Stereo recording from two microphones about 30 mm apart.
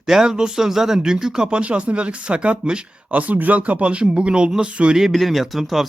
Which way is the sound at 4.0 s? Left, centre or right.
Right.